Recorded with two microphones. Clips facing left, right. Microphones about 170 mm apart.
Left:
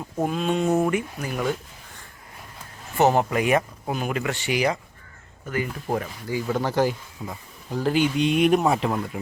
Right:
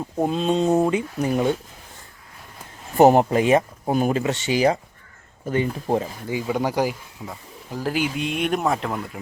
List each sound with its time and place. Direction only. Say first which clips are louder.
0.3 s speech: right 3 dB; 30° right (ahead or behind)
3.2 s speech: right 4 dB; 30° right (ahead or behind)
3.9 s speech: right 7 dB; 40° right (ahead or behind)
4.2 s speech: right 4 dB; 25° right (ahead or behind); by 9.2 s centre (ahead or behind)